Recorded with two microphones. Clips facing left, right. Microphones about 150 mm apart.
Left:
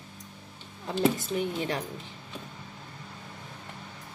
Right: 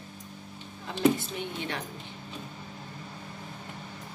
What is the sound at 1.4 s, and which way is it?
Speech, 35° left (ahead or behind).